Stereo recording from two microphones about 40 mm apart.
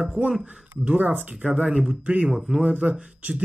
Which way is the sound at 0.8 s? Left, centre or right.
Right.